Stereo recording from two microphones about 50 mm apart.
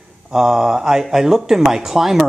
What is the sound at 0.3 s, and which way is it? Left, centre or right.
A man's voice, centre.